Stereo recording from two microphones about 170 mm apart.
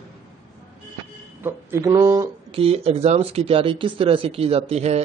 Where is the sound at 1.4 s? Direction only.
15° right (ahead or behind).